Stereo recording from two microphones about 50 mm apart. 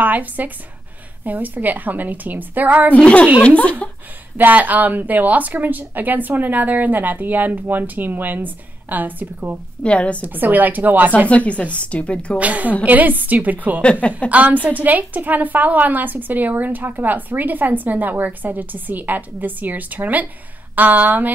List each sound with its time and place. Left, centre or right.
0.0 s a woman's voice: right
3.4 s speech: left
4.4 s a woman's voice: right
9.8 s speech: left
10.2 s a woman's voice: right
11.2 s speech: left
12.4 s a woman's voice: right